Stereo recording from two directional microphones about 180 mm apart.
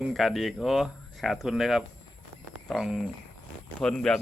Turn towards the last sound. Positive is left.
turn(degrees=5)  # may be behind; listen again after turning